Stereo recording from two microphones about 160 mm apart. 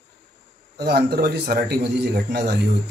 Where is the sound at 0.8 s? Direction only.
80° right.